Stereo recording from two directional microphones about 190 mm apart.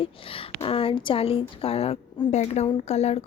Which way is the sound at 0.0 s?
30° left (ahead or behind).